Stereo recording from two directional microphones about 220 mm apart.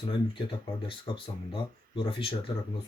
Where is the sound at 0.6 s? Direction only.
20° left (ahead or behind).